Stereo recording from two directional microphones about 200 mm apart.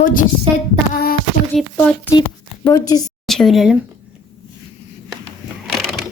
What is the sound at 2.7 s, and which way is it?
Speech, 15° left (ahead or behind).